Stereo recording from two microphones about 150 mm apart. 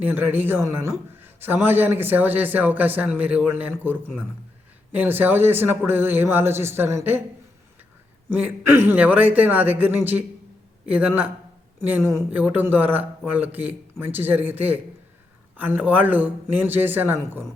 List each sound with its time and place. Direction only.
0.0 s a man's voice: 15° right (ahead or behind)
8.3 s a man's voice: 15° right (ahead or behind)